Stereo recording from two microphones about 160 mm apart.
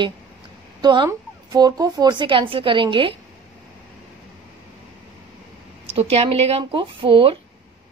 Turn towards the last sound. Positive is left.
turn(degrees=-35)  # may be behind; listen again after turning